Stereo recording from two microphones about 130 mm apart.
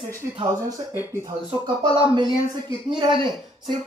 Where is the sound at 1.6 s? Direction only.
35° right (ahead or behind).